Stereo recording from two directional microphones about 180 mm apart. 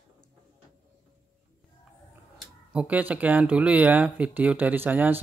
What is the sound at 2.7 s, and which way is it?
Speech, 10° right (ahead or behind).